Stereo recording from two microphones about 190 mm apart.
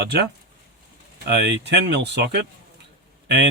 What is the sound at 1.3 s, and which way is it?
Speech, 60° right (ahead or behind).